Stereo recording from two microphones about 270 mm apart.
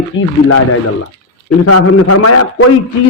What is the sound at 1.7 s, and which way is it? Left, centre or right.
A man's voice, left.